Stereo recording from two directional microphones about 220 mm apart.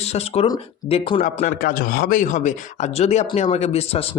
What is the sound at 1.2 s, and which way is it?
A man's voice, 40° left (ahead or behind).